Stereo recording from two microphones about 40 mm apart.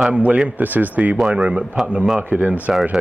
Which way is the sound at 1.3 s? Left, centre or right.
Right.